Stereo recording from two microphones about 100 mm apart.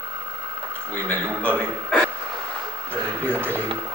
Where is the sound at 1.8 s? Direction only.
10° left (ahead or behind).